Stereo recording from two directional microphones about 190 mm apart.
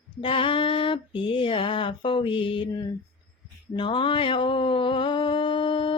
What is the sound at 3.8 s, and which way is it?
Mantra, 25° left (ahead or behind).